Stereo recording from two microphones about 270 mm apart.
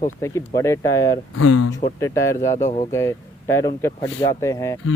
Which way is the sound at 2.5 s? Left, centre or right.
Left.